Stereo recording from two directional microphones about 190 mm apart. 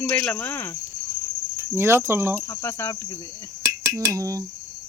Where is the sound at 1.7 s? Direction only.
10° right (ahead or behind).